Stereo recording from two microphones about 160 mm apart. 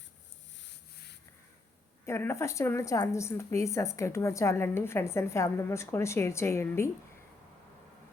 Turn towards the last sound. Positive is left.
turn(degrees=15)  # may be behind; listen again after turning